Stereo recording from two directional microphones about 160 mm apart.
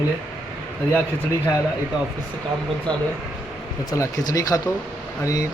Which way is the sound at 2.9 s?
5° left (ahead or behind).